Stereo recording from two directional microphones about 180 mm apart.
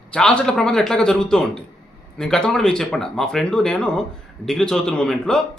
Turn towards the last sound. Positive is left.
turn(degrees=5)  # may be behind; listen again after turning